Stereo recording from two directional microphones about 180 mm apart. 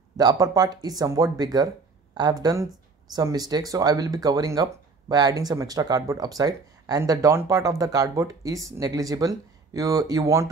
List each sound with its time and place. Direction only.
0.2 s speech: 20° right (ahead or behind)